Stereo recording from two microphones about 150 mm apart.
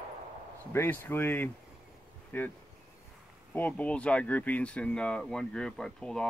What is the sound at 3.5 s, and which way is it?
Speech, 10° left (ahead or behind).